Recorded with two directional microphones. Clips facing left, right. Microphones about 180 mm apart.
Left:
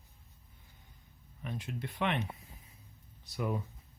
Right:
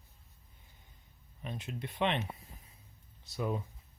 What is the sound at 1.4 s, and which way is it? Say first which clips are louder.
Speech: left 1 dB; 20° right (ahead or behind).